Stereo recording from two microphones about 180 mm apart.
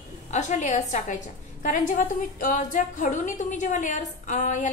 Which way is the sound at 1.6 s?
50° left (ahead or behind).